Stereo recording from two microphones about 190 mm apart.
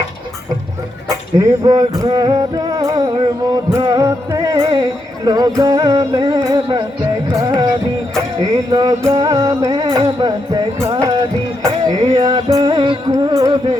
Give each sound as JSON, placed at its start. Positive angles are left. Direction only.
{"t": 1.1, "sound": "music", "side_deg": -20}